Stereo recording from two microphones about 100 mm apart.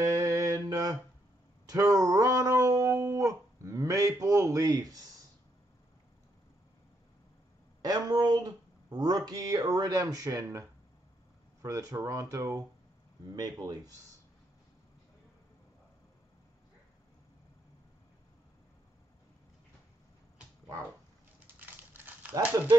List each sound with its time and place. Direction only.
0.0 s mantra: 35° right (ahead or behind)
1.7 s a sound: 35° right (ahead or behind)
4.2 s speech: 35° right (ahead or behind)
7.8 s a sound: 45° right (ahead or behind)
11.6 s speech: 30° right (ahead or behind)
21.5 s crushing: 20° right (ahead or behind)